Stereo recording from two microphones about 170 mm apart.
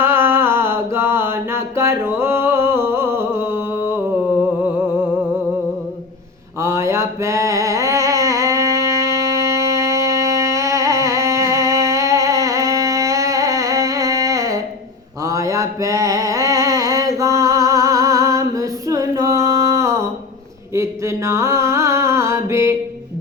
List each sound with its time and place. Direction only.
0.0 s mantra: 15° right (ahead or behind)
6.6 s mantra: 15° right (ahead or behind)
15.2 s a sound: 20° right (ahead or behind)
20.7 s music: 15° right (ahead or behind)